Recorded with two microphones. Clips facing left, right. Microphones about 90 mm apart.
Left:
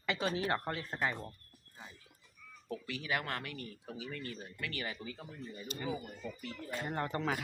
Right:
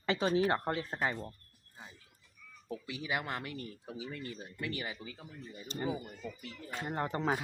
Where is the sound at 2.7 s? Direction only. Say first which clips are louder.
Even; 15° right (ahead or behind).